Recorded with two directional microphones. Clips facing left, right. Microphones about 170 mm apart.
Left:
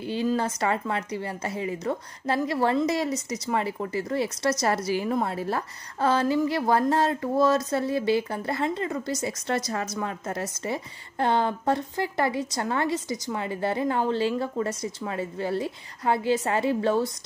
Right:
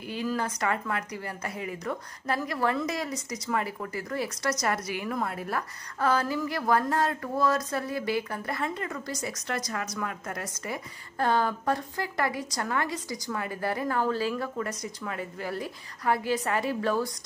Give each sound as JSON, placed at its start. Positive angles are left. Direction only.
{"t": 0.0, "sound": "speech", "side_deg": 30}